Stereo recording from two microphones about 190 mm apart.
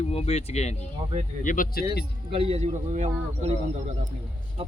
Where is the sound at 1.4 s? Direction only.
45° left (ahead or behind).